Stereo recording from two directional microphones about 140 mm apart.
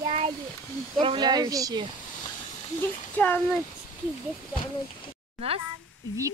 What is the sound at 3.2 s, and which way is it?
Speech, 15° left (ahead or behind).